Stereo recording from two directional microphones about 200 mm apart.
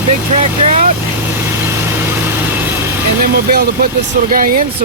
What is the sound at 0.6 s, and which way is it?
Speech, 35° right (ahead or behind).